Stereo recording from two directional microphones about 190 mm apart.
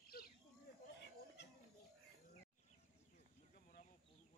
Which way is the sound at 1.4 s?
65° left (ahead or behind).